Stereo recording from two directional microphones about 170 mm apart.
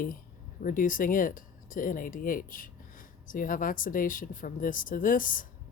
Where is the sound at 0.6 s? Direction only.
55° left (ahead or behind).